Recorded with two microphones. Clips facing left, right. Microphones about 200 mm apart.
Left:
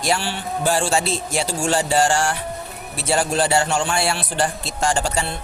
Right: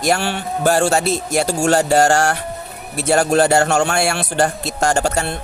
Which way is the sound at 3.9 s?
45° right (ahead or behind).